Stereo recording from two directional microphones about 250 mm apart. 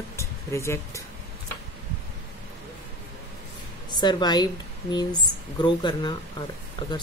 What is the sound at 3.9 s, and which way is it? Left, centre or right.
A woman's voice, centre.